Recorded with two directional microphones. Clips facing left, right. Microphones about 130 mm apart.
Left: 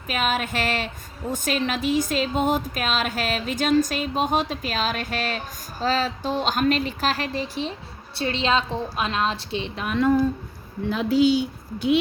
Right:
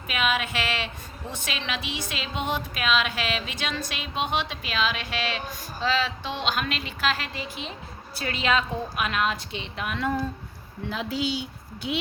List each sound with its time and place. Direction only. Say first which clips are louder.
0.1 s a woman's voice: left 2 dB; 40° left (ahead or behind)
10.8 s a woman's voice: left 9 dB; 45° left (ahead or behind)